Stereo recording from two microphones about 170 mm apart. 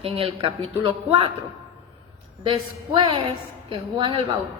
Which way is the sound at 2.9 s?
25° right (ahead or behind).